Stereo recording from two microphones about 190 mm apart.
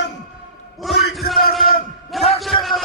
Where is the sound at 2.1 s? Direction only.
Centre (ahead or behind).